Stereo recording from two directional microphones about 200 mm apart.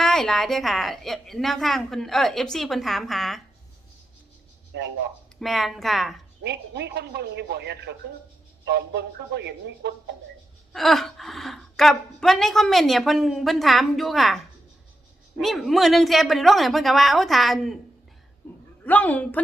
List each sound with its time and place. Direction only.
0.0 s a woman's voice: centre (ahead or behind)
4.7 s speech: 60° right (ahead or behind)
5.4 s a woman's voice: centre (ahead or behind)
6.4 s speech: 55° right (ahead or behind)
10.7 s a woman's voice: centre (ahead or behind)
18.4 s a sound: 5° left (ahead or behind)
18.9 s a woman's voice: 10° left (ahead or behind)